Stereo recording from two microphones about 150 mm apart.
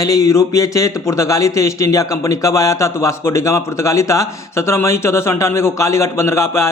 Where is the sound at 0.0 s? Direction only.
20° left (ahead or behind).